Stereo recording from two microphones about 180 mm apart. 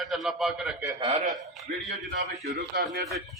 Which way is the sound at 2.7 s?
55° right (ahead or behind).